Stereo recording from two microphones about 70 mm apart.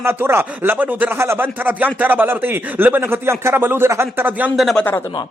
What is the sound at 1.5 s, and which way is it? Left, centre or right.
A man's voice, right.